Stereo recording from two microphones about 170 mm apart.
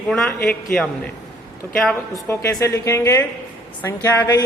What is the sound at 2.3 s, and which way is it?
A man's voice, 15° left (ahead or behind).